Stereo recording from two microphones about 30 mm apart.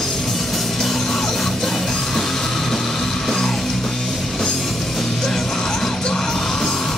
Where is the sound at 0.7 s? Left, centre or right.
Centre.